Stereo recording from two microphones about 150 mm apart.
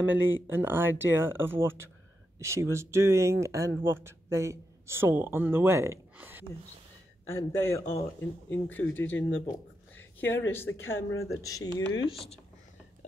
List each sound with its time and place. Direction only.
0.0 s speech: 15° right (ahead or behind)
7.2 s a man's voice: 15° left (ahead or behind)